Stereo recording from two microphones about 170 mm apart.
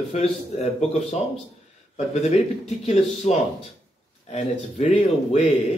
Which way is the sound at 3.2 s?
40° left (ahead or behind).